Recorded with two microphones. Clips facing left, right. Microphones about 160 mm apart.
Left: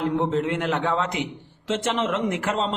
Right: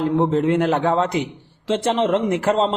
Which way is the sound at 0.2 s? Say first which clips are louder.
Right 6 dB; 35° right (ahead or behind).